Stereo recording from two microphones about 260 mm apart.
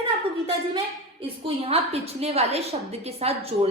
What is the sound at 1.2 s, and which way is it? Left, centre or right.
A woman's voice, right.